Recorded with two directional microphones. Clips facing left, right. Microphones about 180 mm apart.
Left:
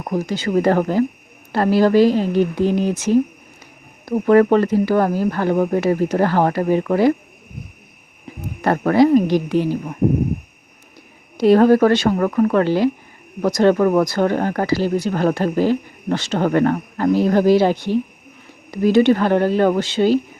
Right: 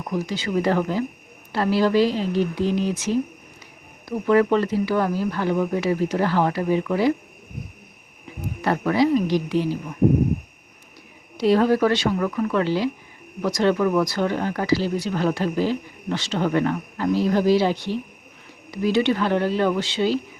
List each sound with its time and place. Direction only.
0.0 s speech: 45° left (ahead or behind)
8.6 s speech: 50° left (ahead or behind)
11.3 s speech: 50° left (ahead or behind)